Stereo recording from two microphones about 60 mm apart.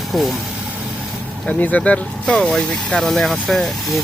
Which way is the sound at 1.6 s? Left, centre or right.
Left.